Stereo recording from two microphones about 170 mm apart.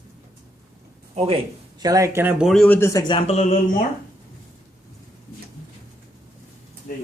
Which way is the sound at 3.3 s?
40° left (ahead or behind).